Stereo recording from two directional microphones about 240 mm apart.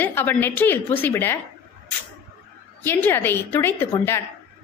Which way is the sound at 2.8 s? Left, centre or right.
Centre.